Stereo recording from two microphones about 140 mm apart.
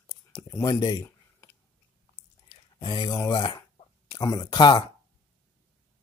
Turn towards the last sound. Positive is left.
turn(degrees=30)  # may be behind; listen again after turning